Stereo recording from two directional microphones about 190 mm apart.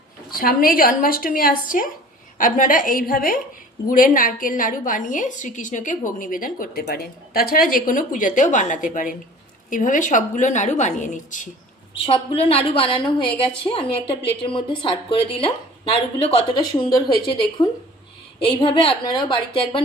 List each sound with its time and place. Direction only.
0.3 s a woman's voice: 50° left (ahead or behind)
12.0 s a woman's voice: 30° left (ahead or behind)